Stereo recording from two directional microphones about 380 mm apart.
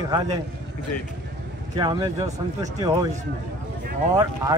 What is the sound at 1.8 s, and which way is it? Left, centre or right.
Speech, centre.